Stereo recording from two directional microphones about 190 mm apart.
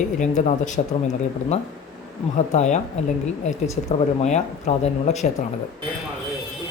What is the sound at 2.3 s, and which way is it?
Speech, 40° left (ahead or behind).